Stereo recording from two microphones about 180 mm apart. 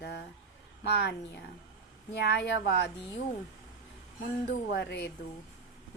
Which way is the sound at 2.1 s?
70° left (ahead or behind).